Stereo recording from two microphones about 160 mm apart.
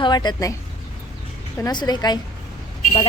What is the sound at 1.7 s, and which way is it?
Speech, 25° left (ahead or behind).